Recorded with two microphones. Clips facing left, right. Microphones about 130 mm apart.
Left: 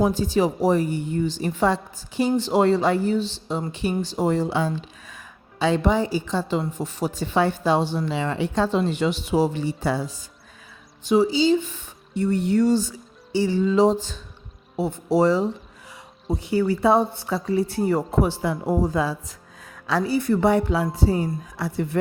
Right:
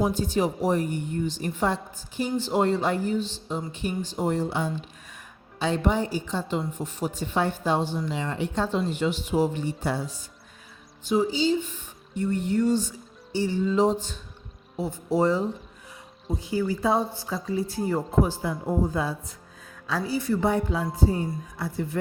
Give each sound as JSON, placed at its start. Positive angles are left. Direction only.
{"t": 0.1, "sound": "a woman's voice", "side_deg": 90}
{"t": 14.8, "sound": "speech", "side_deg": 70}
{"t": 16.3, "sound": "speech", "side_deg": 65}